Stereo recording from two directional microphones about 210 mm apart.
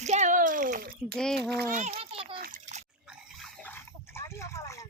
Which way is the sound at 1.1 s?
5° left (ahead or behind).